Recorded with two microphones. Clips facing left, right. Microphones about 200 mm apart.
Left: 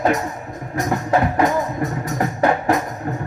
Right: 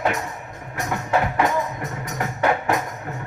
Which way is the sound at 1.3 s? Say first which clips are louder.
Left 4 dB; 35° left (ahead or behind).